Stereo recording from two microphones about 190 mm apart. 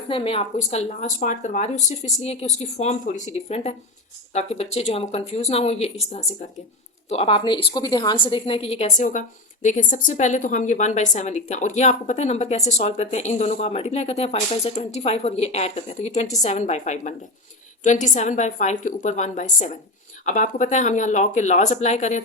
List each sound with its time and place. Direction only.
0.1 s a woman's voice: 30° left (ahead or behind)